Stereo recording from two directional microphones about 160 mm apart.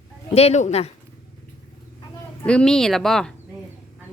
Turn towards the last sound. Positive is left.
turn(degrees=5)  # may be behind; listen again after turning